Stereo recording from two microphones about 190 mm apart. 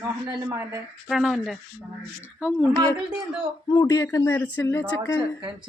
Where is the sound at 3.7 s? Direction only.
20° left (ahead or behind).